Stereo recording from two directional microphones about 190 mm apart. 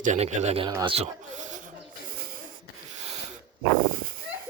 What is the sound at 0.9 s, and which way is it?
Speech, 35° right (ahead or behind).